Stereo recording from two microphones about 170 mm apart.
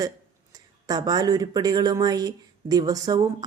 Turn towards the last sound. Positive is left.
turn(degrees=-20)  # may be behind; listen again after turning